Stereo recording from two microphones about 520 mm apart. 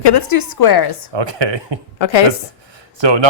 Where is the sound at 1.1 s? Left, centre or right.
Right.